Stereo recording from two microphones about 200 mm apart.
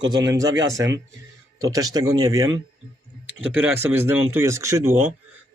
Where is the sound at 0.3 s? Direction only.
15° right (ahead or behind).